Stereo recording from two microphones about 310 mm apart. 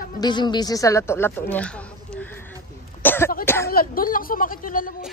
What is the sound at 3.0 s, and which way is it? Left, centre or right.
Cough, centre.